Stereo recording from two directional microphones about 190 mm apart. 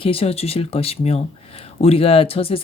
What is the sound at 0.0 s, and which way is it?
Speech, 30° left (ahead or behind).